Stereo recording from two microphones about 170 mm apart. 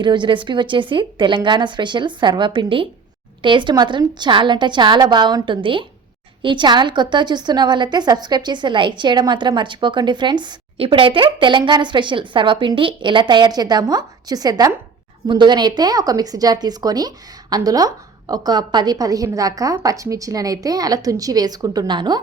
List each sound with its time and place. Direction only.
0.0 s a woman's voice: 25° right (ahead or behind)